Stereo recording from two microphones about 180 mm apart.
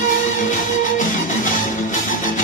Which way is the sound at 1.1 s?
45° left (ahead or behind).